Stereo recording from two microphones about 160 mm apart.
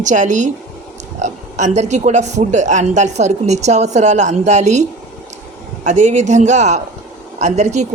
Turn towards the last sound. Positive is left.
turn(degrees=-45)  # may be behind; listen again after turning